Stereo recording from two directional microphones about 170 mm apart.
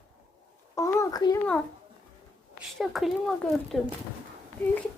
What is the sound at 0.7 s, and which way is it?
Speech, 15° left (ahead or behind).